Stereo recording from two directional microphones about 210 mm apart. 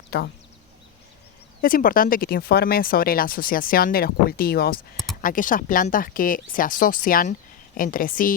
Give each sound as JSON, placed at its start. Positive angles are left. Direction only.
{"t": 0.1, "sound": "speech", "side_deg": 50}
{"t": 1.6, "sound": "speech", "side_deg": 40}